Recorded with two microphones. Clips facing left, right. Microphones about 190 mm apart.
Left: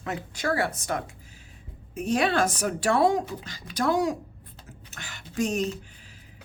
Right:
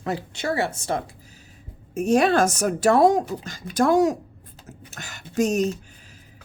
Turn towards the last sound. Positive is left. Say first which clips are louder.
# right 5 dB
turn(degrees=-45)  # may be behind; listen again after turning